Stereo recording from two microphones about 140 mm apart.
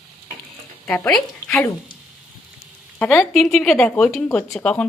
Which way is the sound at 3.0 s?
5° left (ahead or behind).